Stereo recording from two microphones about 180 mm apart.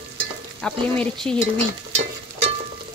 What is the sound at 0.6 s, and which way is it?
Speech, 5° left (ahead or behind).